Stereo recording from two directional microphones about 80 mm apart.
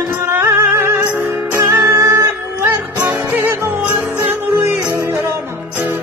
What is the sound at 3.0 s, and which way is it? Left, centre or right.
Music, right.